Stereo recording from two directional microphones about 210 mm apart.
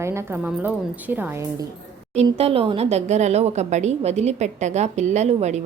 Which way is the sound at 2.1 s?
30° right (ahead or behind).